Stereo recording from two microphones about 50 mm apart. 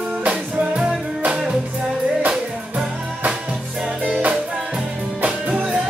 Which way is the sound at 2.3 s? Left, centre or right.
Centre.